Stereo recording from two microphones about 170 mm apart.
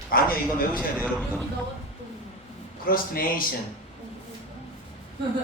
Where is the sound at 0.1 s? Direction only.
55° left (ahead or behind).